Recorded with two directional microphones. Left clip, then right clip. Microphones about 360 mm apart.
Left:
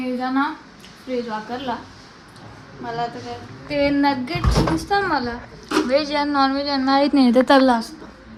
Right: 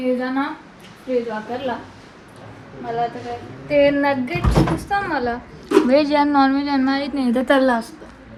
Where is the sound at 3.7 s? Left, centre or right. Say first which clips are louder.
Right 3 dB; centre.